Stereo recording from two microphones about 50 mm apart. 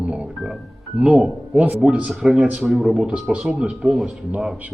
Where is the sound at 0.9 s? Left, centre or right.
Right.